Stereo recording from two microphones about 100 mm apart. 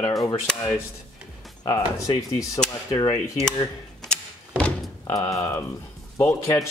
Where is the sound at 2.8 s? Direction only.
45° left (ahead or behind).